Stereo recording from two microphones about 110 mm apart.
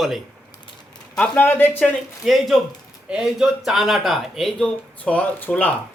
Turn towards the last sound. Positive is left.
turn(degrees=15)  # may be behind; listen again after turning